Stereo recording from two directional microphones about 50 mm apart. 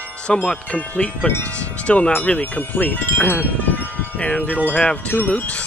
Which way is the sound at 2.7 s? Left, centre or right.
Left.